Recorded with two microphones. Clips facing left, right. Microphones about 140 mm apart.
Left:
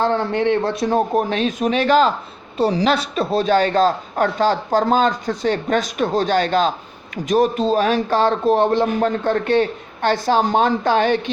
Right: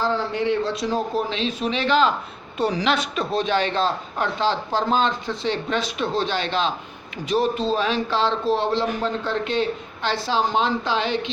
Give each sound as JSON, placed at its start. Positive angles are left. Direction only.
{"t": 0.0, "sound": "speech", "side_deg": 60}